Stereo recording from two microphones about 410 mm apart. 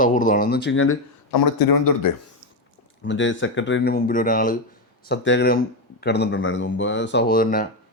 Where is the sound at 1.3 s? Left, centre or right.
Left.